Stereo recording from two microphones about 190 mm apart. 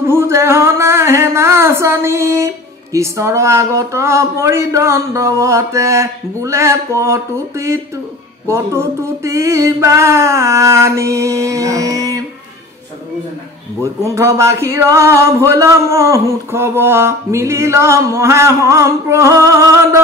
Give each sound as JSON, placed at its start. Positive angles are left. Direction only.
{"t": 0.0, "sound": "music", "side_deg": -15}
{"t": 8.5, "sound": "speech", "side_deg": -15}
{"t": 14.0, "sound": "speech", "side_deg": -15}